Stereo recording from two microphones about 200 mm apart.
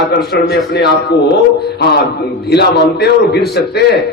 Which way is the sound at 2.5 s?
55° left (ahead or behind).